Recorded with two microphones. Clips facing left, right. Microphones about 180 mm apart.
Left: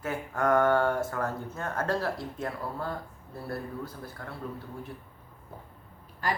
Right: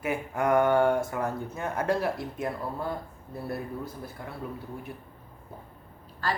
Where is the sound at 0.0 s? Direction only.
15° right (ahead or behind).